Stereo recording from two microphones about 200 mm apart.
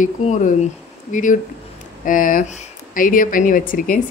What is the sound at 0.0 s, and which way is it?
Speech, 40° left (ahead or behind).